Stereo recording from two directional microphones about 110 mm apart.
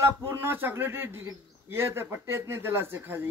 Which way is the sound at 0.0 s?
20° right (ahead or behind).